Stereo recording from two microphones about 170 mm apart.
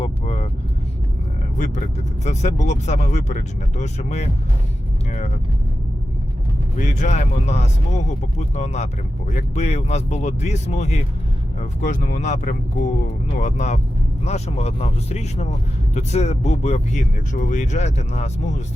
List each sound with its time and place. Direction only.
0.0 s vehicle: 35° left (ahead or behind)
1.5 s speech: 45° left (ahead or behind)
6.7 s speech: 45° left (ahead or behind)